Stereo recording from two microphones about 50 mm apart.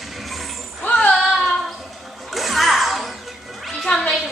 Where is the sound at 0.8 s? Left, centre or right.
Left.